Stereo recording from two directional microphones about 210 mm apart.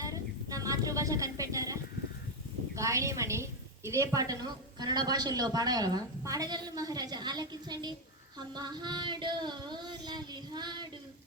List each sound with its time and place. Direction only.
0.0 s a sound: 15° right (ahead or behind)
2.7 s a woman's voice: 15° right (ahead or behind)
8.5 s child singing: 20° right (ahead or behind)